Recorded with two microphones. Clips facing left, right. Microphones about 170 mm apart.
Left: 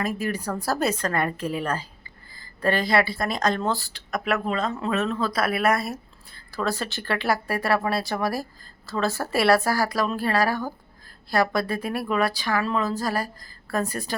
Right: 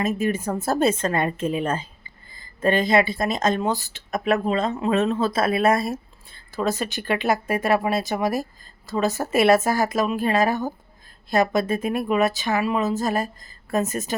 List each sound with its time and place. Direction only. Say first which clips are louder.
0.0 s speech: right 4 dB; 25° right (ahead or behind)